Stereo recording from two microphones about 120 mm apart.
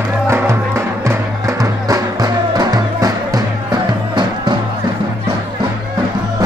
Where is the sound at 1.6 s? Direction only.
30° right (ahead or behind).